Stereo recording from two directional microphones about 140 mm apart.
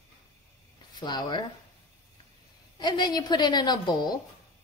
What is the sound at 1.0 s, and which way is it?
Speech, 30° left (ahead or behind).